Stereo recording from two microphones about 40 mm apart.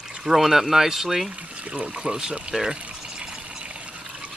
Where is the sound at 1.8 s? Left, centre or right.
Right.